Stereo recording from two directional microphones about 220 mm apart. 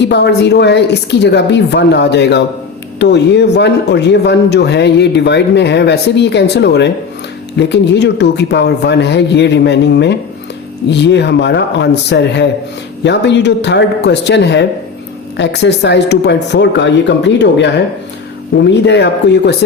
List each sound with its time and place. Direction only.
0.0 s speech: 50° left (ahead or behind)